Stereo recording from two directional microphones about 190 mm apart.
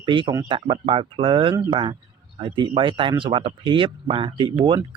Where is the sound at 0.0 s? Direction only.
25° right (ahead or behind).